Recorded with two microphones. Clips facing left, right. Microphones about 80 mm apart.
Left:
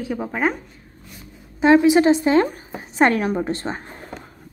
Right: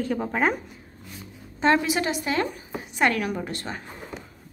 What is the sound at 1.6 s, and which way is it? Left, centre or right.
A woman's voice, centre.